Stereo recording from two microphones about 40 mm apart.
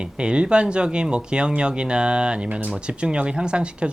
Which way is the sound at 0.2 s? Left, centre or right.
Right.